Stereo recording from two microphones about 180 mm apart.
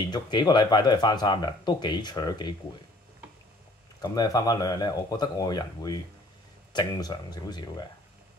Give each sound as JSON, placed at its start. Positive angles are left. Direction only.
{"t": 0.1, "sound": "speech", "side_deg": 25}
{"t": 4.0, "sound": "speech", "side_deg": 20}